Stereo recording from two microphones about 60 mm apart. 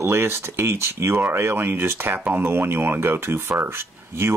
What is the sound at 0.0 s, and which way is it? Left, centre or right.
Speech, right.